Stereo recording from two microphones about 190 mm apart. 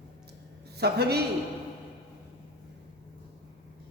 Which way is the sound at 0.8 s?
60° right (ahead or behind).